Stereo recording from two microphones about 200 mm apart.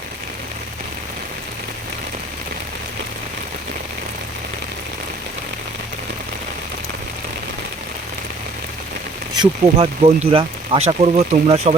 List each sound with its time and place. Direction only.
9.4 s speech: 30° right (ahead or behind)